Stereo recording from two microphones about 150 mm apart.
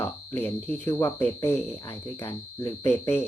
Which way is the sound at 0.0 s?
15° left (ahead or behind).